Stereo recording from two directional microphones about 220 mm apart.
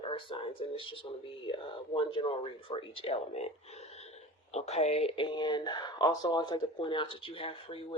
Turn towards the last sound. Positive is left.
turn(degrees=25)  # may be behind; listen again after turning